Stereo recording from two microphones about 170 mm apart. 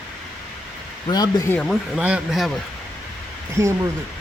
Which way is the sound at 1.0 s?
25° left (ahead or behind).